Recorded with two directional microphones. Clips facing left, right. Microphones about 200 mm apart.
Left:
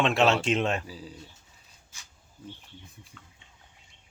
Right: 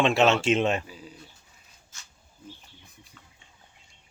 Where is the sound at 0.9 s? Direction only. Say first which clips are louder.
Left 2 dB; 30° left (ahead or behind).